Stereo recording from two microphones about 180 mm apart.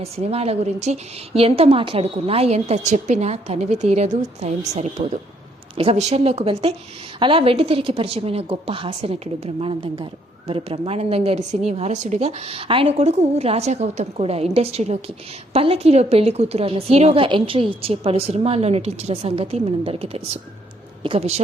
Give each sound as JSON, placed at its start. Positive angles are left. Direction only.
{"t": 0.0, "sound": "a woman's voice", "side_deg": -35}